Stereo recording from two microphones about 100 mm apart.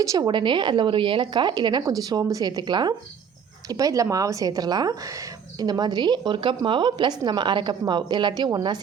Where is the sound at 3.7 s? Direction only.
35° right (ahead or behind).